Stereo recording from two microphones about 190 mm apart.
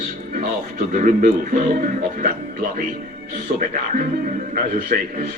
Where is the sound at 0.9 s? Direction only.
45° right (ahead or behind).